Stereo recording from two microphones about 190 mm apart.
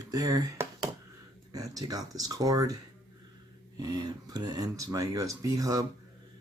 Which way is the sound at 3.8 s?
20° right (ahead or behind).